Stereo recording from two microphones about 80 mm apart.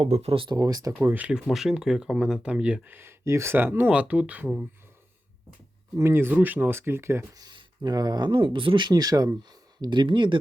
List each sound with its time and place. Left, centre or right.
0.5 s speech: right
1.0 s speech: right
1.5 s speech: centre
2.8 s speech: right
3.8 s speech: centre
6.0 s speech: right
7.5 s speech: right